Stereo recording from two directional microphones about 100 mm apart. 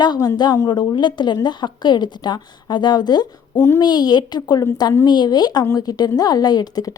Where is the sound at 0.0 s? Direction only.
45° left (ahead or behind).